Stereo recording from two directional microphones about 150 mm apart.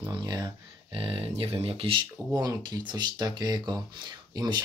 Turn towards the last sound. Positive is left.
turn(degrees=-30)  # may be behind; listen again after turning